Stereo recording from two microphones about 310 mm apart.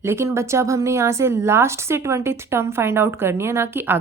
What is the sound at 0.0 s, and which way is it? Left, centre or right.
A woman's voice, centre.